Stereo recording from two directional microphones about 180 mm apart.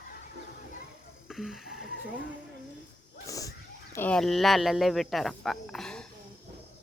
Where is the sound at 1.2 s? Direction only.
Centre (ahead or behind).